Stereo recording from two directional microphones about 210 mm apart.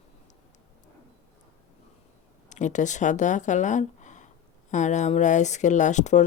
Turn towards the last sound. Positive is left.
turn(degrees=35)  # may be behind; listen again after turning